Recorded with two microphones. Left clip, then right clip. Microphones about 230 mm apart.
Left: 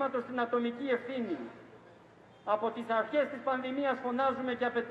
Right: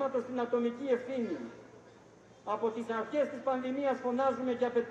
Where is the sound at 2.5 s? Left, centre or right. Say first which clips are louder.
Left 2 dB; right.